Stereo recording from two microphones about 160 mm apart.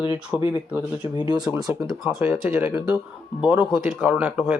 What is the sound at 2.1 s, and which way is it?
Speech, 10° right (ahead or behind).